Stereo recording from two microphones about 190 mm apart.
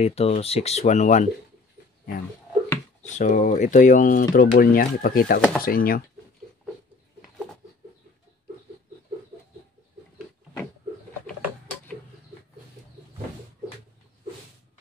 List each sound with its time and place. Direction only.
0.0 s speech: 35° left (ahead or behind)
3.0 s speech: 40° left (ahead or behind)
11.2 s printer: 5° left (ahead or behind)